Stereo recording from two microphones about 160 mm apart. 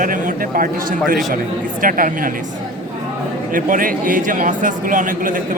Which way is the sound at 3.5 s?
60° right (ahead or behind).